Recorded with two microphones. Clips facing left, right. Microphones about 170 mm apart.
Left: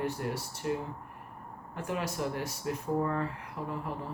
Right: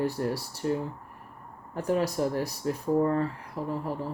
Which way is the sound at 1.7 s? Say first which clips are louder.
Right 8 dB; 35° right (ahead or behind).